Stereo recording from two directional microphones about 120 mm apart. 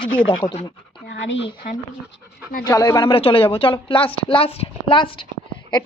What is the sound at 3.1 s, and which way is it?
A woman's voice, 50° left (ahead or behind).